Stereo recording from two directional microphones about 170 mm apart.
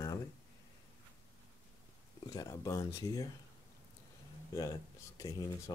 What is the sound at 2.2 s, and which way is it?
Speech, 20° left (ahead or behind).